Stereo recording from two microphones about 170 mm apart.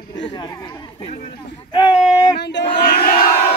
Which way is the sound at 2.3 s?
85° left.